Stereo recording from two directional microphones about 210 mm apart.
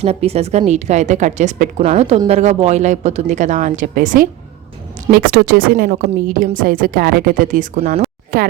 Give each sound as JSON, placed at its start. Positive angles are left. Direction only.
{"t": 0.0, "sound": "a woman's voice", "side_deg": -30}